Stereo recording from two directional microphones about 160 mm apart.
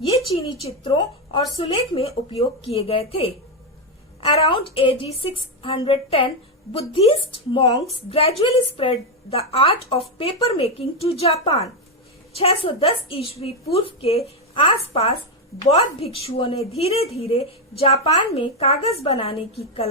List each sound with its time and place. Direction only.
0.0 s a woman's voice: 35° left (ahead or behind)